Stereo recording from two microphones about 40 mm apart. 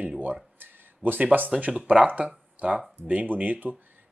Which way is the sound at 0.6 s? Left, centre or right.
Right.